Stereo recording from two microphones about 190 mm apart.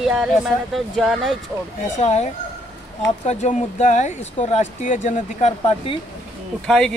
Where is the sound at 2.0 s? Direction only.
35° left (ahead or behind).